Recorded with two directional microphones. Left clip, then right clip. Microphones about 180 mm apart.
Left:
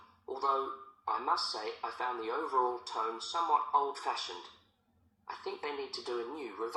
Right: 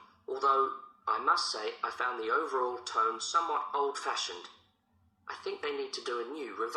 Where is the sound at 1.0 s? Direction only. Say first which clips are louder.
Right 4 dB; 35° right (ahead or behind).